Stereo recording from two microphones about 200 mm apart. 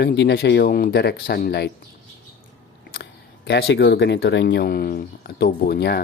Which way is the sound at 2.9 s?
55° left (ahead or behind).